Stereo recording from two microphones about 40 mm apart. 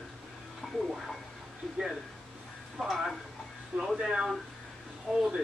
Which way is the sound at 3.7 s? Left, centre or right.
Right.